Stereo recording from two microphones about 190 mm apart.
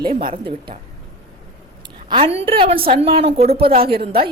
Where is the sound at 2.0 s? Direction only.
30° right (ahead or behind).